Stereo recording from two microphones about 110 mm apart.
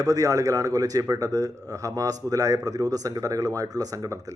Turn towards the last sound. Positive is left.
turn(degrees=-30)  # may be behind; listen again after turning